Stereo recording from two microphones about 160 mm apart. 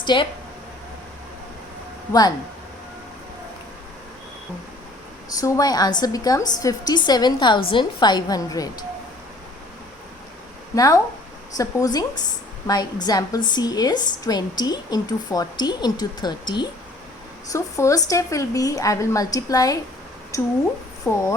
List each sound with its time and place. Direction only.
0.0 s speech: 30° left (ahead or behind)
5.3 s a woman's voice: 25° left (ahead or behind)
10.8 s a woman's voice: 20° left (ahead or behind)